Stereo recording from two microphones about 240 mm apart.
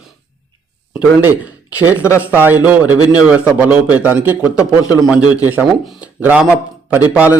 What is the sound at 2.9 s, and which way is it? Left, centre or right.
Speech, centre.